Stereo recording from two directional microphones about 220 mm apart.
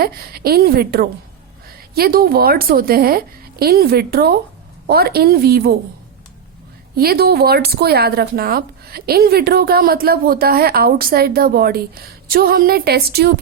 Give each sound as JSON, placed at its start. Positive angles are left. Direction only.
{"t": 0.0, "sound": "speech", "side_deg": -45}
{"t": 6.9, "sound": "speech", "side_deg": -45}